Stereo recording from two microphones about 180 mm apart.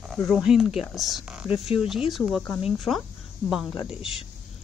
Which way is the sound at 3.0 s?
5° left (ahead or behind).